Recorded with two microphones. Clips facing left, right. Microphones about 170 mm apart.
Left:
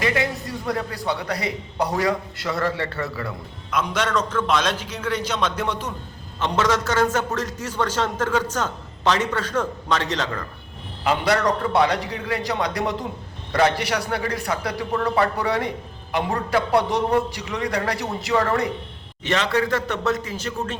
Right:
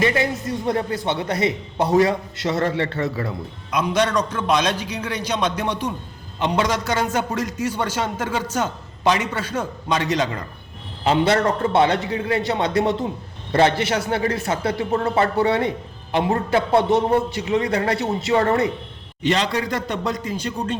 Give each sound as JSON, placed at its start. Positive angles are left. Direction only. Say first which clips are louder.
{"t": 0.0, "sound": "a man's voice", "louder": "right 3 dB", "side_deg": -25}
{"t": 11.0, "sound": "a man's voice", "louder": "right 3 dB", "side_deg": -25}
{"t": 19.5, "sound": "a man's voice", "louder": "left 2 dB", "side_deg": -15}